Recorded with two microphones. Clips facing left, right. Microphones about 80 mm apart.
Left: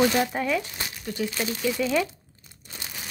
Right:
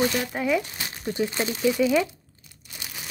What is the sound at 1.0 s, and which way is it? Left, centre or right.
Speech, right.